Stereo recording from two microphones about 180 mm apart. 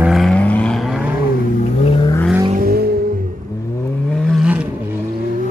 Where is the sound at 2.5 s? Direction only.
55° right (ahead or behind).